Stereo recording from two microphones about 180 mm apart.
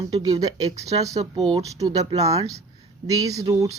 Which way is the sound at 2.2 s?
20° right (ahead or behind).